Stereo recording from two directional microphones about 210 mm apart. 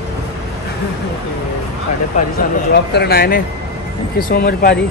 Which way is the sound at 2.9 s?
50° left (ahead or behind).